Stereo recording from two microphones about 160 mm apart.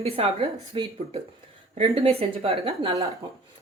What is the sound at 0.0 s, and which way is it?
Speech, 35° right (ahead or behind).